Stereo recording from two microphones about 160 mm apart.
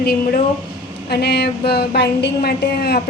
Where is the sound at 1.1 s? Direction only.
90° left.